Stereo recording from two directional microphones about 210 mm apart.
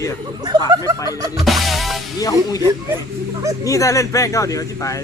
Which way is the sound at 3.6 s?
15° left (ahead or behind).